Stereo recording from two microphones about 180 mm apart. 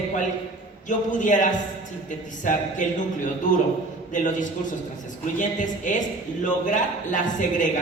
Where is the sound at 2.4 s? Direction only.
45° left (ahead or behind).